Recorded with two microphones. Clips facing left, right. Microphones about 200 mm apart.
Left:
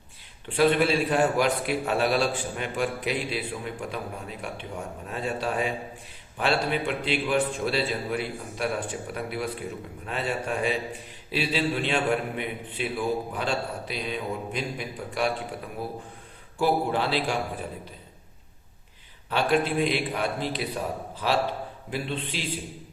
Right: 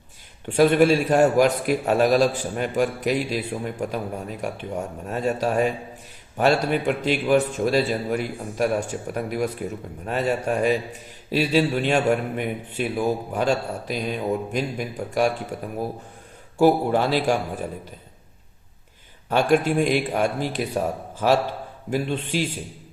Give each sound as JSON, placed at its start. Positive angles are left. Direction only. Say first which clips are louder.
{"t": 0.4, "sound": "a man's voice", "louder": "right 5 dB", "side_deg": -45}
{"t": 19.3, "sound": "a man's voice", "louder": "right 5 dB", "side_deg": -45}